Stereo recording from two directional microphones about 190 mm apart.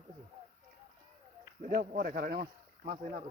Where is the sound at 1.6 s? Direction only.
50° right (ahead or behind).